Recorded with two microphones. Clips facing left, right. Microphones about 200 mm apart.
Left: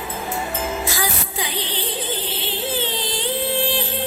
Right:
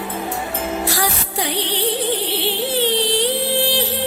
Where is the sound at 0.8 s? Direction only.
65° right (ahead or behind).